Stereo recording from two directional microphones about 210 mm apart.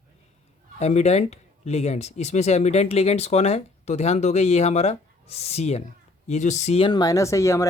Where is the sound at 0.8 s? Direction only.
30° left (ahead or behind).